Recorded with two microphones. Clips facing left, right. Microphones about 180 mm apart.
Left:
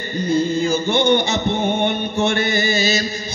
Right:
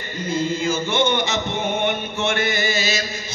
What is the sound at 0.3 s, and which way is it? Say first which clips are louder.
Mantra: left 4 dB; 35° left (ahead or behind).